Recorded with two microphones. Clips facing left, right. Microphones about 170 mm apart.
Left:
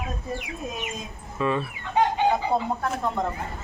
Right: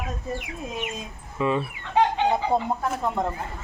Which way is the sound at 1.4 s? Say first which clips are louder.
Right 1 dB; 20° right (ahead or behind).